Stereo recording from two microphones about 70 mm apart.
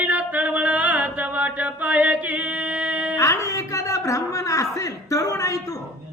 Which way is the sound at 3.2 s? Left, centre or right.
Left.